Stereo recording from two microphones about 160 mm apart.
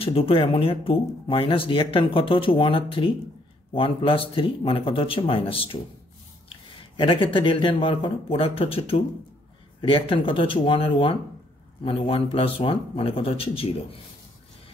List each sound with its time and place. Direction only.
0.0 s speech: 35° left (ahead or behind)
7.0 s speech: 30° left (ahead or behind)